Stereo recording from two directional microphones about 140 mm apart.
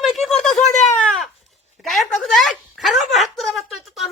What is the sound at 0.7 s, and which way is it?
Speech, 55° left (ahead or behind).